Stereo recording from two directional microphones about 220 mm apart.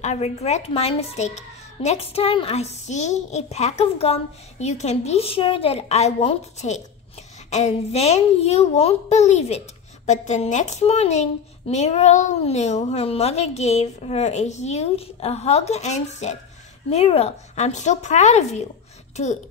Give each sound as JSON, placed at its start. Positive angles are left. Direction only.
{"t": 0.0, "sound": "a child's voice", "side_deg": 30}